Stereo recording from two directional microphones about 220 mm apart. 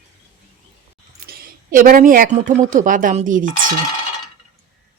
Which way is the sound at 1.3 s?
40° right (ahead or behind).